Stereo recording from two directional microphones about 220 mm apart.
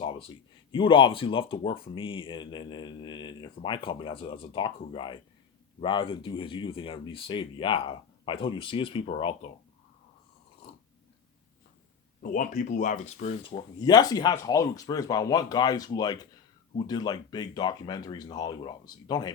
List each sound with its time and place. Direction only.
0.7 s speech: 25° left (ahead or behind)
12.2 s speech: 35° left (ahead or behind); by 19.3 s 20° left (ahead or behind)